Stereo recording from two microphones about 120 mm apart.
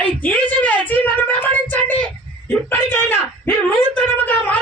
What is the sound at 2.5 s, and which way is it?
Speech, 15° left (ahead or behind).